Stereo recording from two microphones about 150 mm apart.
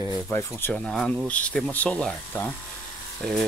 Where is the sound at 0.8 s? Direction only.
Centre (ahead or behind).